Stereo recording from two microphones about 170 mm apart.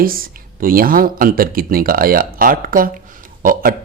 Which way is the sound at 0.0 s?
60° right (ahead or behind).